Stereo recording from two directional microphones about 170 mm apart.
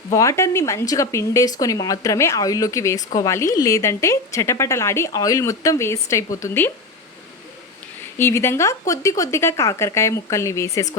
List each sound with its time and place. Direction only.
0.1 s a woman's voice: 20° left (ahead or behind)
8.2 s a woman's voice: 15° left (ahead or behind)